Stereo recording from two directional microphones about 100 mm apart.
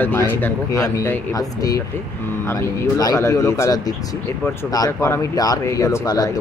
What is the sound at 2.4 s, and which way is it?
Speech, 25° left (ahead or behind).